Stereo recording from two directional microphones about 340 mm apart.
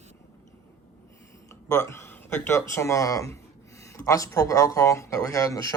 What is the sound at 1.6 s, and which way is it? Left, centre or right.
Speech, centre.